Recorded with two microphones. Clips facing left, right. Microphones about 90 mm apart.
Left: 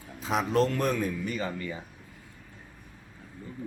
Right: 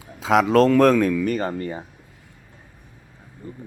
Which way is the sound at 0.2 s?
90° right.